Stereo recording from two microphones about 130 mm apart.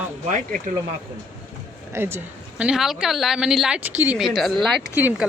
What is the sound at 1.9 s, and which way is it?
Speech, 20° right (ahead or behind).